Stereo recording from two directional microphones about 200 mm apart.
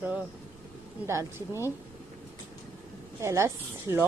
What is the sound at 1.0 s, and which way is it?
Speech, 15° right (ahead or behind).